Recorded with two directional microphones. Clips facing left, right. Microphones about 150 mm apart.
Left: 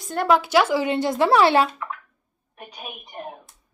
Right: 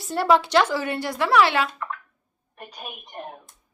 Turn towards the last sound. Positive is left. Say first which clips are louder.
# left 1 dB
turn(degrees=0)  # may be behind; listen again after turning